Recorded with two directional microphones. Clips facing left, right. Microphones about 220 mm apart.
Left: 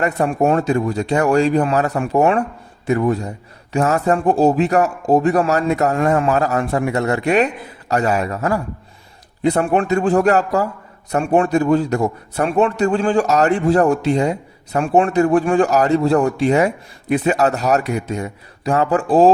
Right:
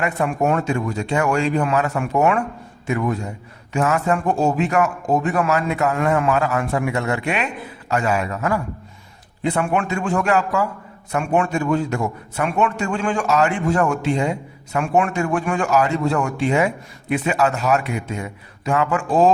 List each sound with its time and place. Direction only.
0.0 s speech: 35° left (ahead or behind)